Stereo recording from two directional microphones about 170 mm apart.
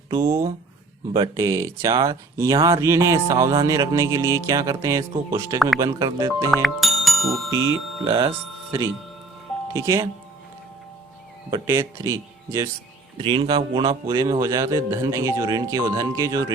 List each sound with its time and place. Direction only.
0.2 s a man's voice: 15° right (ahead or behind)
6.5 s speech: centre (ahead or behind)
7.5 s a man's voice: 15° right (ahead or behind)
9.7 s speech: 20° right (ahead or behind)
11.5 s speech: 20° right (ahead or behind)
13.2 s a man's voice: 30° right (ahead or behind)